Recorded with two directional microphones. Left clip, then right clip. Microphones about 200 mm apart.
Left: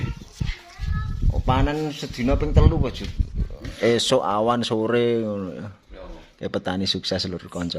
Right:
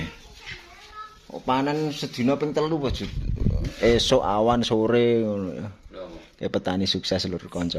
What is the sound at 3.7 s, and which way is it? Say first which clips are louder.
Speech: even; centre (ahead or behind).